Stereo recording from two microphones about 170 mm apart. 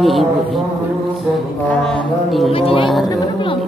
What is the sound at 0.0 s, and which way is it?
Speech, centre (ahead or behind).